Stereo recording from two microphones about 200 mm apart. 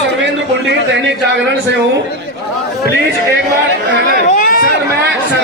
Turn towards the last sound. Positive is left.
turn(degrees=45)  # may be behind; listen again after turning